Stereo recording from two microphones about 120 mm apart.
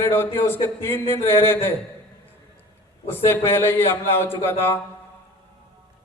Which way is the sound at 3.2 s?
20° left (ahead or behind).